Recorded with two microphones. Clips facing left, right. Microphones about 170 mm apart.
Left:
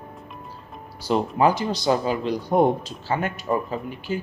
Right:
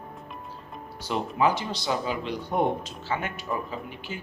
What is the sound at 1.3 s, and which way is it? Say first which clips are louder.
Speech: left 2 dB; 40° left (ahead or behind).